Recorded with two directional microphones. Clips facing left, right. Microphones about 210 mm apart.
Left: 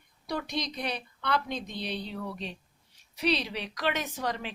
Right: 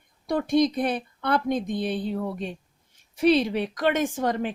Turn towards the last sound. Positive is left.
turn(degrees=-50)  # may be behind; listen again after turning